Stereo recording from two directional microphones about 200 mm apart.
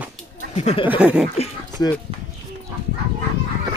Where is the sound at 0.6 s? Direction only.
35° left (ahead or behind).